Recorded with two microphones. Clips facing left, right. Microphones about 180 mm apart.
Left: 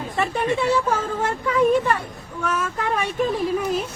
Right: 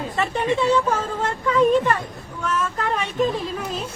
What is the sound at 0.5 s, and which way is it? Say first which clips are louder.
Speech: right 3 dB; 10° left (ahead or behind).